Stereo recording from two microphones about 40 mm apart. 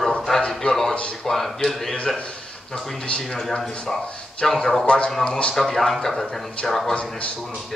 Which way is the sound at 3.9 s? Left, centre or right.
Centre.